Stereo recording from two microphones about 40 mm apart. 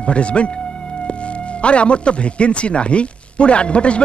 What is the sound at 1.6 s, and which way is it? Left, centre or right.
Speech, left.